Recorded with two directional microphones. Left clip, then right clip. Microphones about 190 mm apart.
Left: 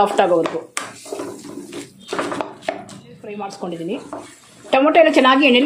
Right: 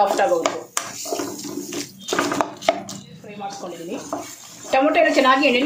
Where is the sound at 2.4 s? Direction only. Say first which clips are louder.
Right 4 dB; 5° right (ahead or behind).